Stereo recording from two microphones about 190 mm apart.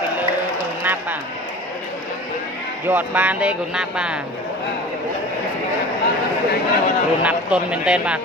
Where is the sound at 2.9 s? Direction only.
10° right (ahead or behind).